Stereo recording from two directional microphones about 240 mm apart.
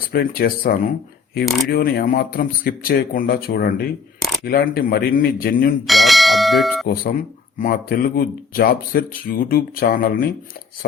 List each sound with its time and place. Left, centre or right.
0.1 s speech: left
5.9 s bell: centre
6.8 s speech: left